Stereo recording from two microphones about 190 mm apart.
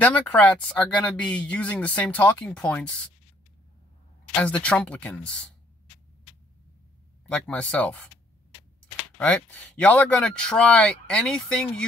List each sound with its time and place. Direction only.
0.0 s speech: 10° left (ahead or behind)
4.3 s speech: 5° left (ahead or behind)
7.2 s speech: 5° left (ahead or behind)
9.2 s speech: 5° left (ahead or behind)